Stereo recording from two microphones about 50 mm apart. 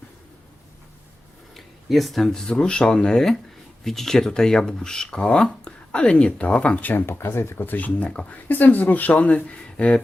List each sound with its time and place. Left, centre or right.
1.5 s speech: centre; by 6.8 s left
6.8 s speech: left
7.7 s speech: left
8.4 s speech: left